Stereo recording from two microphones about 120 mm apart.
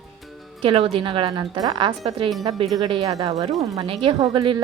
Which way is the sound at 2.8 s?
45° right (ahead or behind).